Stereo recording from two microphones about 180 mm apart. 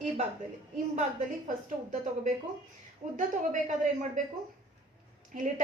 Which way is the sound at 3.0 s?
40° right (ahead or behind).